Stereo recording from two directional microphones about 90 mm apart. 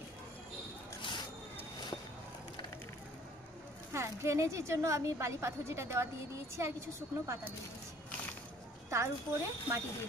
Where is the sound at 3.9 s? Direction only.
30° right (ahead or behind).